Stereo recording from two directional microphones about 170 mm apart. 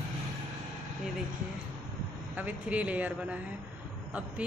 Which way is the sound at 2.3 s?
10° right (ahead or behind).